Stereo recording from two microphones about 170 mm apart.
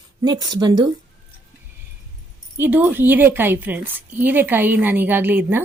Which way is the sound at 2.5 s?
10° right (ahead or behind).